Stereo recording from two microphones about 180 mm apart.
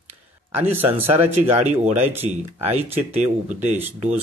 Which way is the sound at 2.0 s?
10° right (ahead or behind).